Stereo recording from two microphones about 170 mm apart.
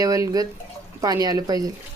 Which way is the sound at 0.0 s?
20° right (ahead or behind).